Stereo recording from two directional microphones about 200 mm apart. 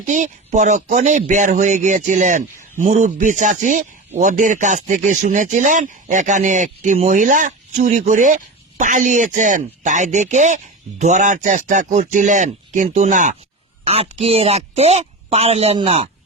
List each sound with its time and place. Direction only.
0.0 s speech: 40° right (ahead or behind)